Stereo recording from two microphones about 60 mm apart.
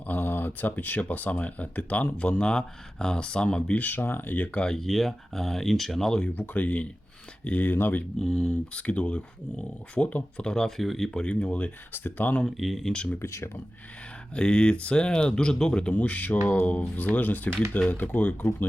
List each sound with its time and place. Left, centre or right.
0.1 s speech: left; by 3.8 s centre
3.8 s speech: left
4.6 s speech: centre
6.3 s speech: left
8.2 s speech: centre
8.7 s speech: left
10.4 s speech: centre; by 12.4 s left
12.5 s speech: centre
12.9 s speech: centre
13.1 s speech: left
14.3 s speech: centre